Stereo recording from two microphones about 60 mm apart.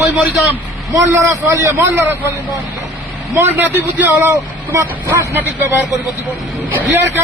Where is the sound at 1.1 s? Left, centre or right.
Right.